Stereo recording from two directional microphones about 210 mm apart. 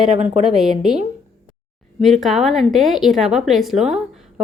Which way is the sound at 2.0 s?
Centre (ahead or behind).